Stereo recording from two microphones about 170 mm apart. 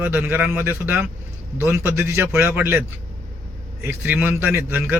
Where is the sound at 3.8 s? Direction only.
10° right (ahead or behind).